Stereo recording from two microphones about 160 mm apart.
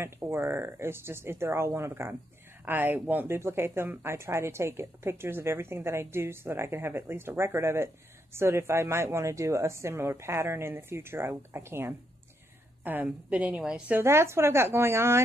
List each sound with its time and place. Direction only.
0.0 s speech: 15° right (ahead or behind)